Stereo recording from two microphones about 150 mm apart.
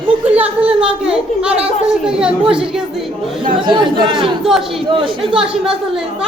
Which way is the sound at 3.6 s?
35° right (ahead or behind).